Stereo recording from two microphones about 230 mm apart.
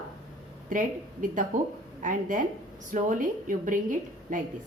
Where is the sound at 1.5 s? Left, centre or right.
Right.